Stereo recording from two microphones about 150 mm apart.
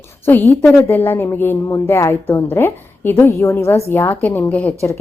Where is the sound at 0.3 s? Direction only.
15° left (ahead or behind).